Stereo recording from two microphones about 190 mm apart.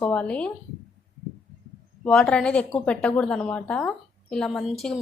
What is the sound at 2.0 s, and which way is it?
A woman's voice, 5° left (ahead or behind).